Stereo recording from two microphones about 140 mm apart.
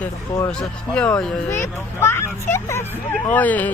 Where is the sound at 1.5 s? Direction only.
20° left (ahead or behind).